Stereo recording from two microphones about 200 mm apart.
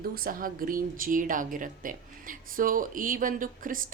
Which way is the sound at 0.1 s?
45° right (ahead or behind).